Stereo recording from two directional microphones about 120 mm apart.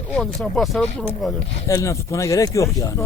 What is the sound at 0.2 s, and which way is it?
Speech, 5° left (ahead or behind).